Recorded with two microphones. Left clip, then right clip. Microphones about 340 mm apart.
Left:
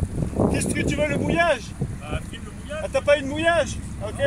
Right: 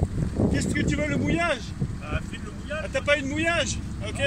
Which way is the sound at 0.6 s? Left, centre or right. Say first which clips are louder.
Left 3 dB; left.